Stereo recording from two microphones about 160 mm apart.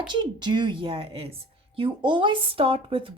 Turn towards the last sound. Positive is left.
turn(degrees=-35)  # may be behind; listen again after turning